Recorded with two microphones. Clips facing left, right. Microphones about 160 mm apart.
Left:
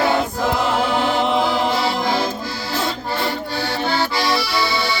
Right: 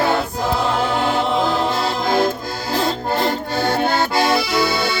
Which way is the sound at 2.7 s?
45° right (ahead or behind).